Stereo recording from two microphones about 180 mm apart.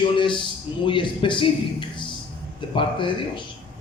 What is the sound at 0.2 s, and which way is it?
Speech, 25° left (ahead or behind).